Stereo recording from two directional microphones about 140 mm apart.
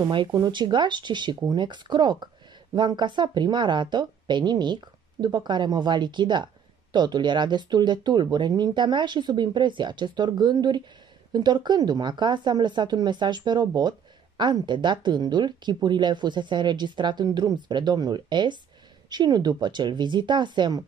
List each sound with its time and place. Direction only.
0.1 s speech: 30° right (ahead or behind)